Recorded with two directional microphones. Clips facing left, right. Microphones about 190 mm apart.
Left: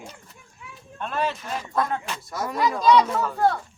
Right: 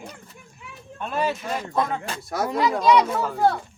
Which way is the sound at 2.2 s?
70° right (ahead or behind).